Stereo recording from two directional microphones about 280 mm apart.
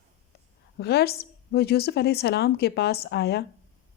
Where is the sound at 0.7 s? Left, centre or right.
Left.